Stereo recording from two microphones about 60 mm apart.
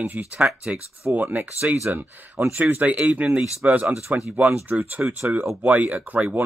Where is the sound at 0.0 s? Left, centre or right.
Right.